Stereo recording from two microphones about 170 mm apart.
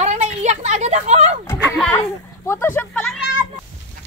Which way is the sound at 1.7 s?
10° left (ahead or behind).